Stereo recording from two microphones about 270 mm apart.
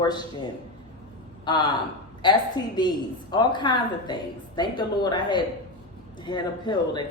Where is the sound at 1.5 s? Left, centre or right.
Centre.